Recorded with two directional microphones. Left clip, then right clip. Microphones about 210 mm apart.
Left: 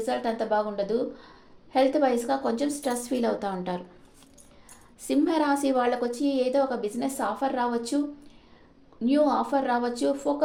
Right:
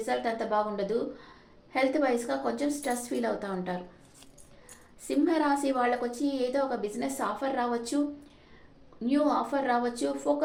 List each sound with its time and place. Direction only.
0.0 s a woman's voice: 35° left (ahead or behind)
5.0 s a woman's voice: 45° left (ahead or behind)
9.0 s a woman's voice: 35° left (ahead or behind)